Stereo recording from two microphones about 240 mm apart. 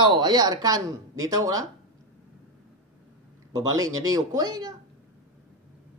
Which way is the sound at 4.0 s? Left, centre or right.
Centre.